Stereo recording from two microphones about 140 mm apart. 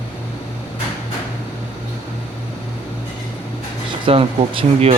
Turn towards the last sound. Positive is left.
turn(degrees=-45)  # may be behind; listen again after turning